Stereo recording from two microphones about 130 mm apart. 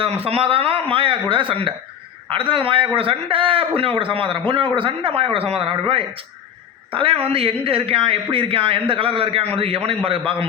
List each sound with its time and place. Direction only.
0.0 s speech: 50° right (ahead or behind)